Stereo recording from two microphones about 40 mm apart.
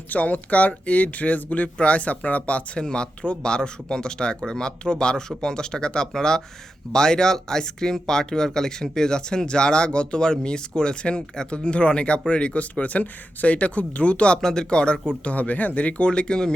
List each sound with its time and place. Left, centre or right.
0.1 s speech: left
2.8 s speech: left
14.4 s speech: centre
15.2 s speech: left